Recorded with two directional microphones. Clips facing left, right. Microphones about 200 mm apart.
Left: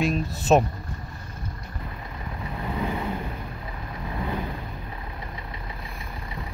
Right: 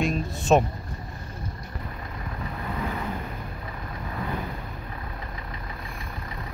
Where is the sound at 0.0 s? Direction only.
Centre (ahead or behind).